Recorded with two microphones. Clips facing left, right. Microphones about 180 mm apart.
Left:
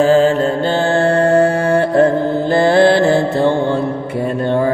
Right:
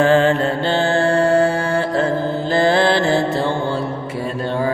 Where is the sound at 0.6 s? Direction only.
50° left (ahead or behind).